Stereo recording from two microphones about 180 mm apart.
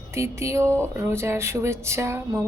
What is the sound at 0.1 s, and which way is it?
Speech, 15° right (ahead or behind).